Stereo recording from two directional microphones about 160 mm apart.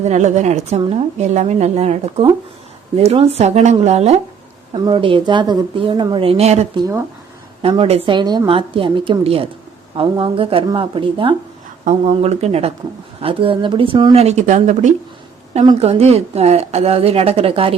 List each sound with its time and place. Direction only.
0.0 s a woman's voice: 45° right (ahead or behind)
6.7 s speech: 20° right (ahead or behind)
7.6 s a woman's voice: 35° right (ahead or behind)
11.9 s a woman's voice: 45° right (ahead or behind)
15.6 s a woman's voice: 40° right (ahead or behind)